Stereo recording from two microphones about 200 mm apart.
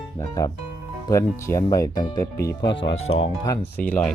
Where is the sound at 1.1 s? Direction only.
15° left (ahead or behind).